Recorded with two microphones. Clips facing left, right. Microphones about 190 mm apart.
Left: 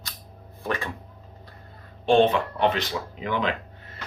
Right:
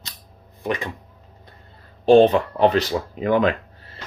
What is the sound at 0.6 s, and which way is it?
Speech, 15° right (ahead or behind).